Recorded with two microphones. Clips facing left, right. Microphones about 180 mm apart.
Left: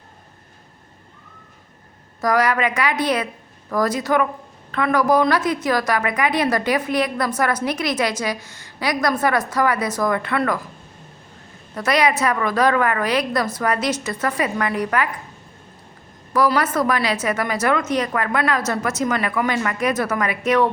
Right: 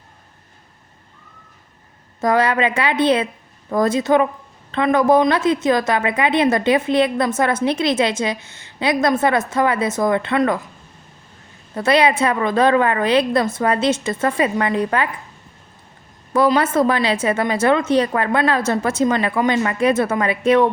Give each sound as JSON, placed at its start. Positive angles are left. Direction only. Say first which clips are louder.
{"t": 2.2, "sound": "a woman's voice", "louder": "right 2 dB", "side_deg": -25}
{"t": 11.7, "sound": "a woman's voice", "louder": "right 3 dB", "side_deg": -25}
{"t": 16.3, "sound": "a woman's voice", "louder": "right 3 dB", "side_deg": -25}